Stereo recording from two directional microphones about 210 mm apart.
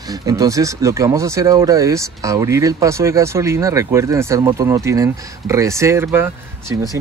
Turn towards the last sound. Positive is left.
turn(degrees=-10)  # may be behind; listen again after turning